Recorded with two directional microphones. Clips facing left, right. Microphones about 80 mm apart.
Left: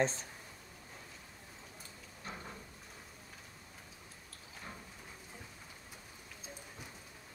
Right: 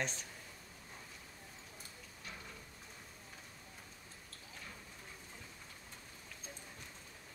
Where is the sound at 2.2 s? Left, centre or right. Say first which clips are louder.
Left 5 dB; left.